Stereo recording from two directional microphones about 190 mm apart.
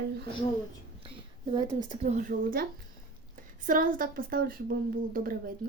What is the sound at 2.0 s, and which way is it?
Speech, 40° right (ahead or behind).